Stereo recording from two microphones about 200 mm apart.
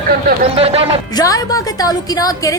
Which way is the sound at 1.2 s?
15° left (ahead or behind).